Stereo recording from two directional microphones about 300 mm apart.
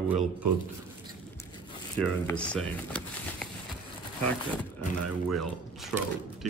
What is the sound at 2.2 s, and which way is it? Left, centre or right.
Speech, centre.